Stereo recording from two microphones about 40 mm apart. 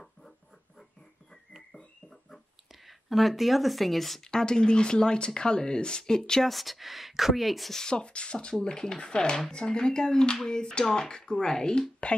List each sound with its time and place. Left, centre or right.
2.9 s speech: centre
4.2 s speech: centre
6.5 s speech: centre
7.7 s speech: centre